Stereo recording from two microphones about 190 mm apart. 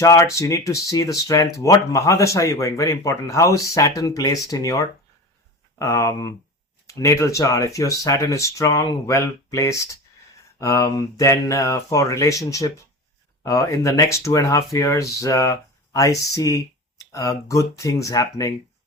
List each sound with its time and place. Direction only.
0.0 s speech: 15° left (ahead or behind)